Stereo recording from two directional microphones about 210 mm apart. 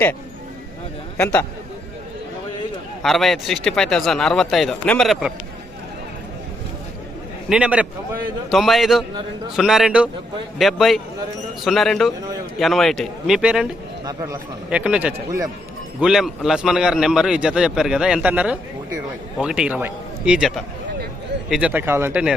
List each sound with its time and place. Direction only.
1.1 s speech: 5° left (ahead or behind)
3.0 s a man's voice: centre (ahead or behind)
7.5 s a man's voice: 5° right (ahead or behind)
14.0 s a man's voice: 15° right (ahead or behind)
21.5 s a man's voice: 5° right (ahead or behind)